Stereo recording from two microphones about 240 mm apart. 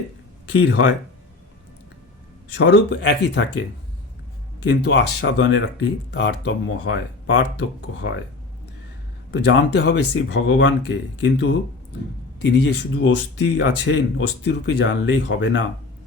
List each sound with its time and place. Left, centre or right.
0.5 s speech: left
2.6 s speech: left
4.6 s speech: left
9.3 s speech: left